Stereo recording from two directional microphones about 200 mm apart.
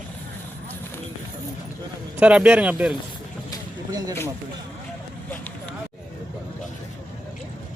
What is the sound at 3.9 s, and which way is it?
Speech, 20° right (ahead or behind).